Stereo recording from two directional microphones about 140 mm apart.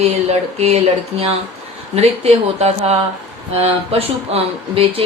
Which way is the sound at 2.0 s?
50° right (ahead or behind).